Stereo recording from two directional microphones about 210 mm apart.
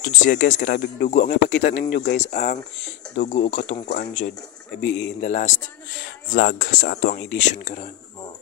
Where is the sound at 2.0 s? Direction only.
55° left (ahead or behind).